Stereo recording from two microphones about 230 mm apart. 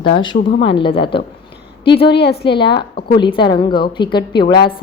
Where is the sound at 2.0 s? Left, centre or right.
Left.